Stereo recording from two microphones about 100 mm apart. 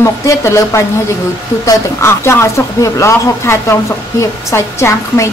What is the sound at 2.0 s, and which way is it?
Speech, 25° left (ahead or behind).